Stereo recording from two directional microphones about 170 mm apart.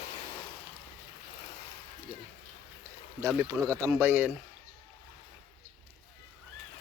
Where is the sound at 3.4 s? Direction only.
20° right (ahead or behind).